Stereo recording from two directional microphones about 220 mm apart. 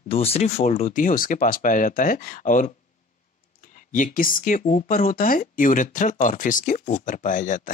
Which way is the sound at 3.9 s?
40° left (ahead or behind).